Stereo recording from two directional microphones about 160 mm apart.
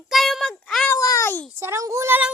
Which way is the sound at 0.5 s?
5° left (ahead or behind).